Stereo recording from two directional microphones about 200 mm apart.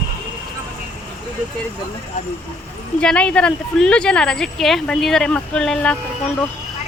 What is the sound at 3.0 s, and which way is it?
Speech, 5° left (ahead or behind).